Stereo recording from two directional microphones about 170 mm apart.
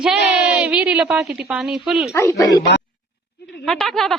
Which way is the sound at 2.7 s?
90° left.